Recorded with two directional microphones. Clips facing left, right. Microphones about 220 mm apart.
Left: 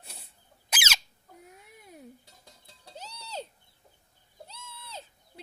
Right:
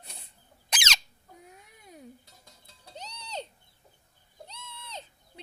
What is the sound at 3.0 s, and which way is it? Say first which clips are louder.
Music: right 1 dB; 5° left (ahead or behind).